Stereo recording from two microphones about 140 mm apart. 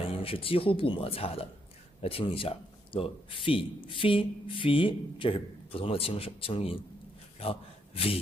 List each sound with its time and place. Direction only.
0.2 s a man's voice: 40° left (ahead or behind)